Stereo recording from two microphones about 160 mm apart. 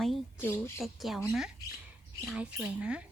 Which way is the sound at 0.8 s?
Centre (ahead or behind).